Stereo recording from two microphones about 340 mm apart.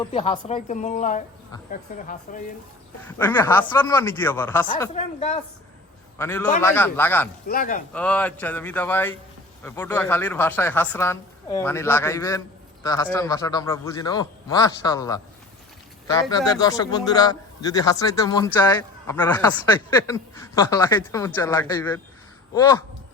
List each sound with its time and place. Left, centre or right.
0.0 s a woman's voice: centre
3.0 s speech: centre
4.7 s a woman's voice: centre
6.1 s a man's voice: centre
7.4 s a woman's voice: left
7.9 s a man's voice: centre